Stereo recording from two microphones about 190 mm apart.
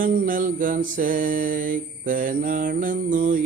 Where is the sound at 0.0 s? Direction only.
45° right (ahead or behind).